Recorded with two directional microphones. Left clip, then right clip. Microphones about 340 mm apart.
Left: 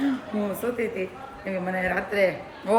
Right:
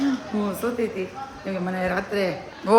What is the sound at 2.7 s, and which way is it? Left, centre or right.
Speech, centre.